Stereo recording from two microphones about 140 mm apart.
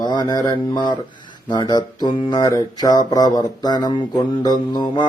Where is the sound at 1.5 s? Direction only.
30° left (ahead or behind).